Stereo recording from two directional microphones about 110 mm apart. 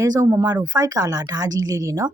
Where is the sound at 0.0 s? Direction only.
35° right (ahead or behind).